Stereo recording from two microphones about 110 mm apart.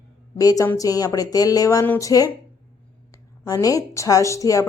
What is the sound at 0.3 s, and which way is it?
A woman's voice, 35° left (ahead or behind).